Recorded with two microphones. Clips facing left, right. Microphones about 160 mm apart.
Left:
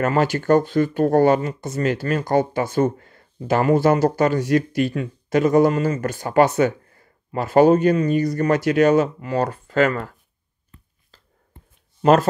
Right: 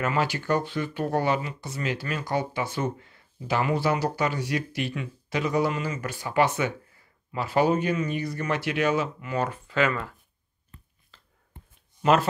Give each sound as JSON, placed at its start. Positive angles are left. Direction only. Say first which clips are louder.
{"t": 0.0, "sound": "speech", "louder": "left 7 dB", "side_deg": 45}
{"t": 11.1, "sound": "a sound", "louder": "left 3 dB", "side_deg": 40}
{"t": 12.0, "sound": "speech", "louder": "left 6 dB", "side_deg": 40}